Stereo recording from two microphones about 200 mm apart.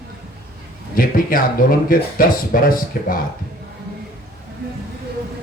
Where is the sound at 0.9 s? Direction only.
45° left (ahead or behind).